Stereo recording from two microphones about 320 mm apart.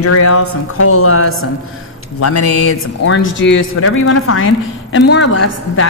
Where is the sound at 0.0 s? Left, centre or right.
Left.